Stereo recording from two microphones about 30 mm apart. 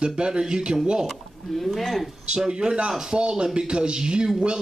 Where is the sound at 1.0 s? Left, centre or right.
Centre.